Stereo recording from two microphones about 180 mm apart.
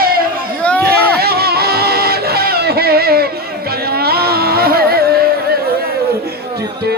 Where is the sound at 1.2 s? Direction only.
60° right (ahead or behind).